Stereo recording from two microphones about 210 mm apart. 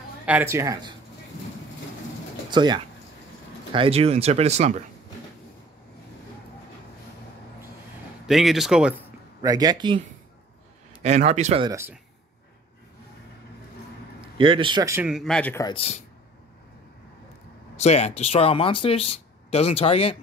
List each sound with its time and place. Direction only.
0.2 s speech: 5° right (ahead or behind)
2.5 s speech: 20° right (ahead or behind)
8.3 s speech: centre (ahead or behind)
9.4 s a man's voice: 15° right (ahead or behind)
11.7 s speech: 10° right (ahead or behind)
14.4 s speech: 25° right (ahead or behind); by 15.6 s 5° left (ahead or behind)
15.6 s speech: 25° left (ahead or behind)
17.7 s speech: 30° left (ahead or behind)